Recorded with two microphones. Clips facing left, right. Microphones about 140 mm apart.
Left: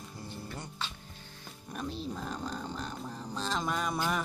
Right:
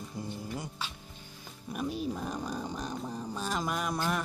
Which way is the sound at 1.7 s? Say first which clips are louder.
Right 4 dB; 10° right (ahead or behind).